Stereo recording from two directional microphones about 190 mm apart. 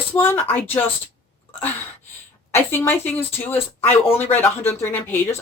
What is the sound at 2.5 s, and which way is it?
Speech, 10° left (ahead or behind).